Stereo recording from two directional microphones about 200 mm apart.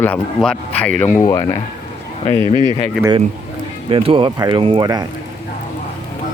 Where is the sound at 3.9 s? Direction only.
25° right (ahead or behind).